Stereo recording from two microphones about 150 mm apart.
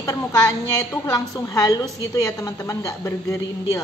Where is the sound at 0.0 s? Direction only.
20° left (ahead or behind).